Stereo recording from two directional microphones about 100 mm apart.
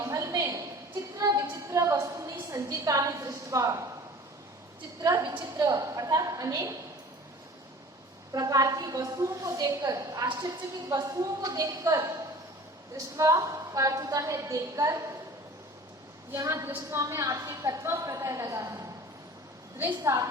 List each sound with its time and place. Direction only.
0.0 s a sound: 30° right (ahead or behind)
2.5 s a woman's voice: 35° right (ahead or behind)
5.0 s a woman's voice: 35° right (ahead or behind)
8.3 s a woman's voice: 35° right (ahead or behind)
13.1 s a woman's voice: 30° right (ahead or behind)
16.3 s a woman's voice: 30° right (ahead or behind)
20.0 s a woman's voice: 35° right (ahead or behind)